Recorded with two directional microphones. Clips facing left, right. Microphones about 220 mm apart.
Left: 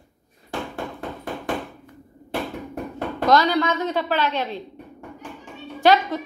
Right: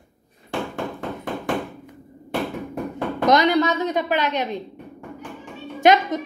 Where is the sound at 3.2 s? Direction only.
20° right (ahead or behind).